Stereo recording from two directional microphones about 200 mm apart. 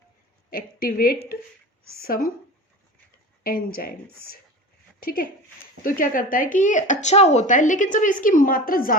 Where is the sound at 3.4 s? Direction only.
45° left (ahead or behind).